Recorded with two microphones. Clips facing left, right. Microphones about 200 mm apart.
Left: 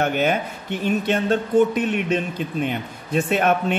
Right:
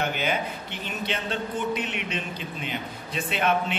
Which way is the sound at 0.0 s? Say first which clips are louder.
Left 6 dB; 50° left (ahead or behind).